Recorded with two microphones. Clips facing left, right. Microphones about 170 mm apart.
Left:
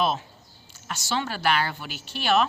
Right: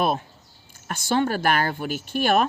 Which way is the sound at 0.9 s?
50° right (ahead or behind).